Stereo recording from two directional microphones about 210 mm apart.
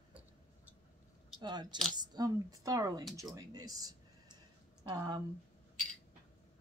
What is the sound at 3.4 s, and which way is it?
Speech, 15° right (ahead or behind).